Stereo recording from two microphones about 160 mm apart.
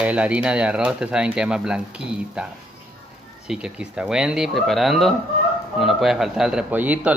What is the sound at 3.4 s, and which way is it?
Speech, 5° right (ahead or behind).